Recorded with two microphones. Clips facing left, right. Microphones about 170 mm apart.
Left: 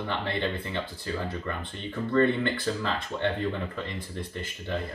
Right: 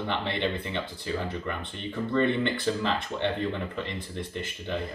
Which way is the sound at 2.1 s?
20° right (ahead or behind).